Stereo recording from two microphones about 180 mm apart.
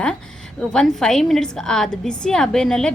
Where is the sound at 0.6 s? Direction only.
5° left (ahead or behind).